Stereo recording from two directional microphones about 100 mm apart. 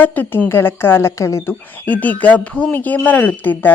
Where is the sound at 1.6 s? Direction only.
15° left (ahead or behind).